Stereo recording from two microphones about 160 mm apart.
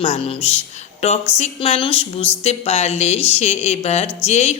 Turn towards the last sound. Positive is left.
turn(degrees=40)  # may be behind; listen again after turning